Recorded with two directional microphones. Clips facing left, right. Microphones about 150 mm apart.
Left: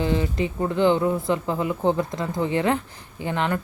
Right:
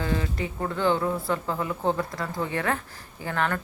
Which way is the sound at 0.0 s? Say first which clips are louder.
Left 5 dB; 20° left (ahead or behind).